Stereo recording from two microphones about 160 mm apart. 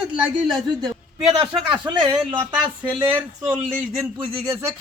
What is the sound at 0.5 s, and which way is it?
Speech, 25° right (ahead or behind).